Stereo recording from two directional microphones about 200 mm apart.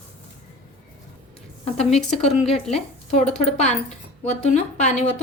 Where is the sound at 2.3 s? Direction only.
30° left (ahead or behind).